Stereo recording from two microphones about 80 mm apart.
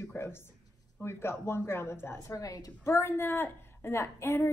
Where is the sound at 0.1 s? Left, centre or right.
Left.